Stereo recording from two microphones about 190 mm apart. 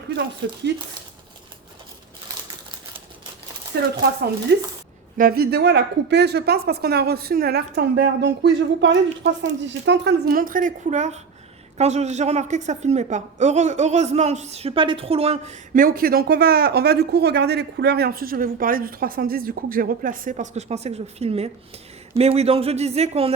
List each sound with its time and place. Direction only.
3.7 s speech: 60° right (ahead or behind)
5.1 s a woman's voice: 50° right (ahead or behind); by 15.5 s 30° right (ahead or behind)
15.7 s a woman's voice: 50° right (ahead or behind)